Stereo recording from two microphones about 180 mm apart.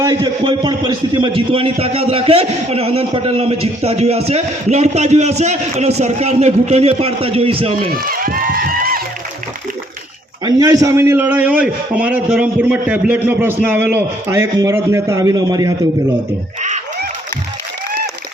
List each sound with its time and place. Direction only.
0.0 s a man's voice: 25° right (ahead or behind)
7.9 s run: 55° right (ahead or behind)
10.4 s a man's voice: 20° right (ahead or behind)
16.6 s a sound: 40° right (ahead or behind)